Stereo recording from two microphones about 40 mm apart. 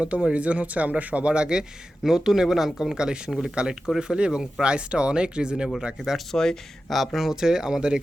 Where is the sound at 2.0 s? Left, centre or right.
Centre.